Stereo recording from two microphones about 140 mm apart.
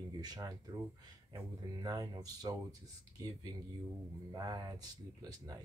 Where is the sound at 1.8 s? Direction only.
25° right (ahead or behind).